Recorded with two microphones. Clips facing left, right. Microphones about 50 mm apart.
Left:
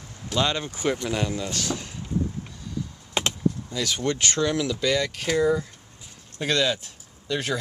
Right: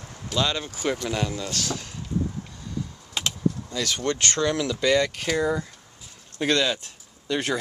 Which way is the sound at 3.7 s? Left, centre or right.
Centre.